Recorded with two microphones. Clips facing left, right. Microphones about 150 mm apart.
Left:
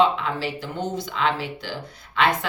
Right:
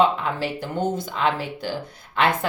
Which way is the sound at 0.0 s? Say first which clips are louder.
Even; 50° right (ahead or behind).